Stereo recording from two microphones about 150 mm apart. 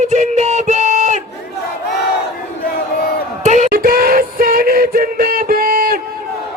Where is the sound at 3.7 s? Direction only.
75° right (ahead or behind).